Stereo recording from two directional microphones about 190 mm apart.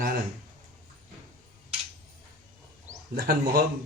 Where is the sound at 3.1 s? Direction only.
55° right (ahead or behind).